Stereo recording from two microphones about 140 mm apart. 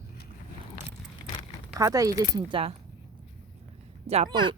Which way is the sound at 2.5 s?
40° right (ahead or behind).